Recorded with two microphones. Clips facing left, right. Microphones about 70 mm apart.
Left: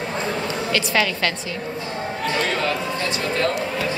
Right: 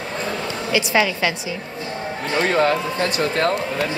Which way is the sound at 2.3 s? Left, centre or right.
Right.